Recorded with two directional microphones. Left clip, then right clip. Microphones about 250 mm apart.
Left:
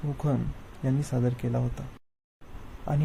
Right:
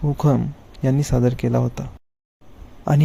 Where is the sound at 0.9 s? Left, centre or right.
Right.